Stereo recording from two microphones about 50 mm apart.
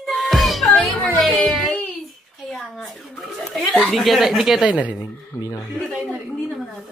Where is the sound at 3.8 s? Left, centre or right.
Centre.